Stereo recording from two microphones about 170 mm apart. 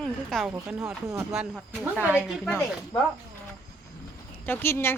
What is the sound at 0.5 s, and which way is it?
Speech, 10° right (ahead or behind).